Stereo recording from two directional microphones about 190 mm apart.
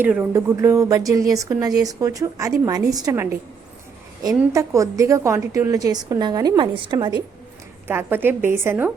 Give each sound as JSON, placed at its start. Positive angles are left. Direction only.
{"t": 0.0, "sound": "a woman's voice", "side_deg": -10}
{"t": 4.5, "sound": "a woman's voice", "side_deg": -15}
{"t": 7.9, "sound": "a woman's voice", "side_deg": -10}